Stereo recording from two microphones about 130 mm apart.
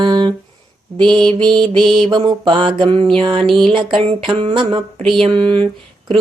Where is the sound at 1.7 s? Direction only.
Centre (ahead or behind).